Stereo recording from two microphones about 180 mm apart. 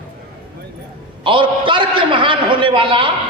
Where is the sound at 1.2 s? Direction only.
30° right (ahead or behind).